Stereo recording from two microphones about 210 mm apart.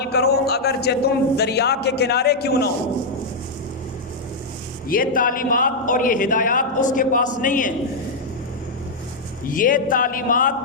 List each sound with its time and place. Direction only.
0.0 s a man's voice: 50° left (ahead or behind)
4.9 s speech: 40° left (ahead or behind)
9.4 s speech: 40° left (ahead or behind)